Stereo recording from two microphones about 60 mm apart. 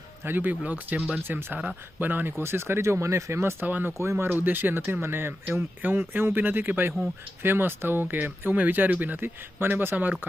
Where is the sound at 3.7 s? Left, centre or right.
Right.